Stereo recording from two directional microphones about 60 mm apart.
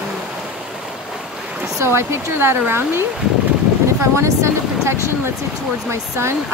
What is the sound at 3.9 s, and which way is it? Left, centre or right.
Speech, right.